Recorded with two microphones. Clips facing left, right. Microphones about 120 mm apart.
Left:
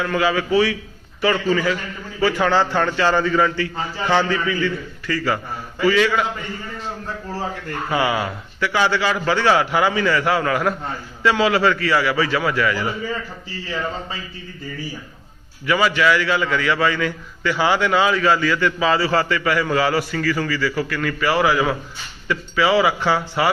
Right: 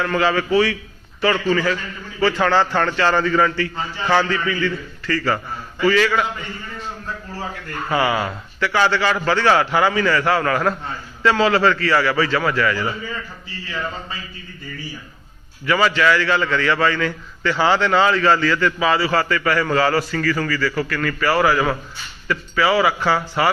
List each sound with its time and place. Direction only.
0.0 s a man's voice: 10° left (ahead or behind)
7.9 s a man's voice: 15° left (ahead or behind)
8.1 s speech: 20° right (ahead or behind)
8.6 s a man's voice: 15° left (ahead or behind)
15.6 s a man's voice: 15° left (ahead or behind)
18.8 s a man's voice: 30° left (ahead or behind)